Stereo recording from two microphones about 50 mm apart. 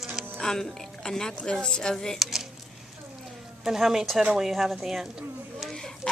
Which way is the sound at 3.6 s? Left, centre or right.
Centre.